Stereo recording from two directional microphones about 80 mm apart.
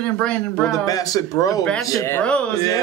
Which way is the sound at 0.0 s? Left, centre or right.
Centre.